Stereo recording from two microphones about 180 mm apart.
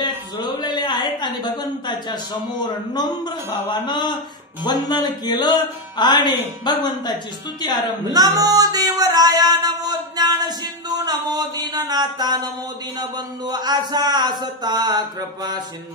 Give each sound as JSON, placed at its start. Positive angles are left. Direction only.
{"t": 0.0, "sound": "a sound", "side_deg": 25}
{"t": 2.7, "sound": "music", "side_deg": 25}
{"t": 8.1, "sound": "singing", "side_deg": -20}
{"t": 13.0, "sound": "speech", "side_deg": -25}